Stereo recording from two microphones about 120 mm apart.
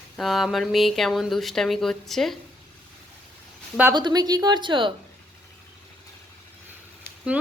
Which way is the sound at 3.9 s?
35° right (ahead or behind).